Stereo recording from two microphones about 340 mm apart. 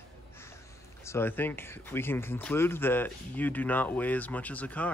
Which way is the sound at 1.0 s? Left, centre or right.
Centre.